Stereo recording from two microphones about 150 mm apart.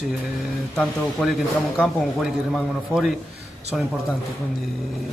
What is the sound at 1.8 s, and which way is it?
A man's voice, centre (ahead or behind).